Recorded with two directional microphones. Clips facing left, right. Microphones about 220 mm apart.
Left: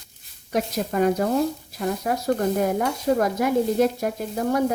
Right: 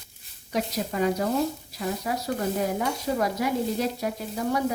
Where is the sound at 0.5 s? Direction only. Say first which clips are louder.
Left 4 dB; 50° left (ahead or behind).